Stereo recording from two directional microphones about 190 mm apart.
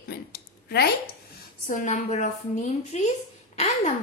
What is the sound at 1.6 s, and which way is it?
A woman's voice, 40° left (ahead or behind).